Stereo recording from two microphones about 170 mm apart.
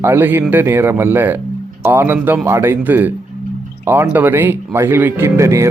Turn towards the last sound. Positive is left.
turn(degrees=-15)  # may be behind; listen again after turning